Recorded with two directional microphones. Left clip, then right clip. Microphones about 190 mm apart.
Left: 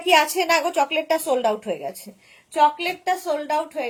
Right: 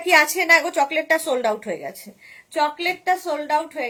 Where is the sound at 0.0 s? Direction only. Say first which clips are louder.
Right 1 dB; 15° right (ahead or behind).